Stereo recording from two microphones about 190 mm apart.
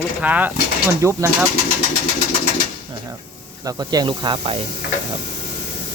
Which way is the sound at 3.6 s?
20° right (ahead or behind).